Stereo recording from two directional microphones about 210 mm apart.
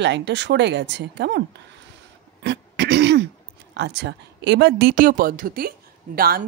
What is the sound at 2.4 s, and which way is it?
Throat clearing, 55° right (ahead or behind).